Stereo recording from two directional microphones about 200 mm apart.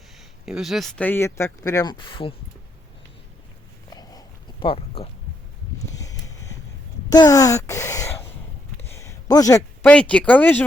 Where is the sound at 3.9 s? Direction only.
20° left (ahead or behind).